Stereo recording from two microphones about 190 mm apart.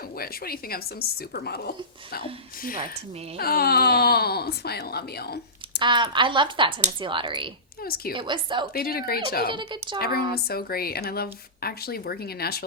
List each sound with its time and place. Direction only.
0.2 s speech: 50° left (ahead or behind)
3.3 s speech: 55° left (ahead or behind)
5.8 s speech: 25° right (ahead or behind)
7.8 s a woman's voice: 55° left (ahead or behind)
8.1 s speech: 25° right (ahead or behind)
8.7 s a woman's voice: 50° left (ahead or behind)
9.5 s speech: 25° right (ahead or behind)
10.0 s speech: 55° left (ahead or behind)